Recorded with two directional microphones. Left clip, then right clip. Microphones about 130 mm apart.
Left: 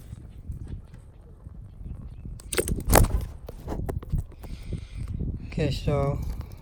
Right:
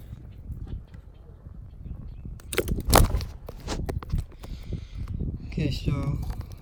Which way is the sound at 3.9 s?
45° left (ahead or behind).